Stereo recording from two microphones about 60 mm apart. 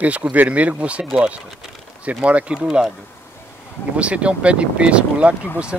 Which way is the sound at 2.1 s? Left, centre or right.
Right.